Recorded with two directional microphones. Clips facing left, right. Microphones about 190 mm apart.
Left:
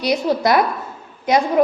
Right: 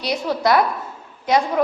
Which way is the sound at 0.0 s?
15° left (ahead or behind).